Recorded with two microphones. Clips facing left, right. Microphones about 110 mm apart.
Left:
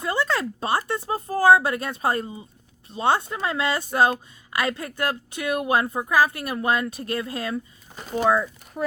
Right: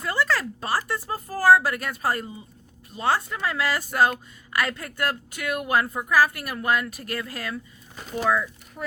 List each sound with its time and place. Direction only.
0.0 s speech: 20° left (ahead or behind)